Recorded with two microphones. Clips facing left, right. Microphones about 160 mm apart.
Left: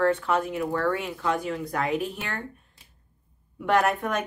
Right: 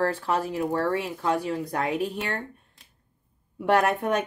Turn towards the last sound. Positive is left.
turn(degrees=-30)  # may be behind; listen again after turning